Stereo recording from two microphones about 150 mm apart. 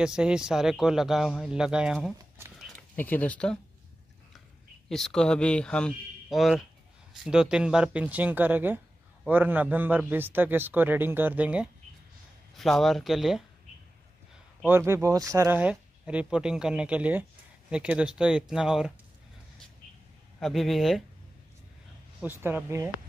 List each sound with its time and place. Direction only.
0.0 s speech: 5° right (ahead or behind)
2.1 s a sound: 20° right (ahead or behind)
3.0 s speech: 10° left (ahead or behind)
4.8 s speech: centre (ahead or behind)
12.5 s speech: centre (ahead or behind)
14.6 s speech: 15° right (ahead or behind)
20.3 s speech: centre (ahead or behind)
22.2 s speech: 15° right (ahead or behind)